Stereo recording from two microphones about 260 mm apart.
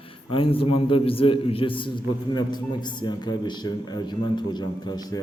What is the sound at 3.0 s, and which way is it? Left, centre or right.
A man's voice, centre.